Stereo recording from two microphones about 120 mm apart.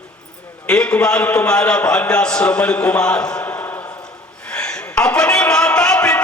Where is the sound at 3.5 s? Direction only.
25° left (ahead or behind).